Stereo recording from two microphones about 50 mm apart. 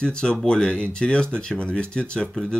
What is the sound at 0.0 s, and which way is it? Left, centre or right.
Speech, centre.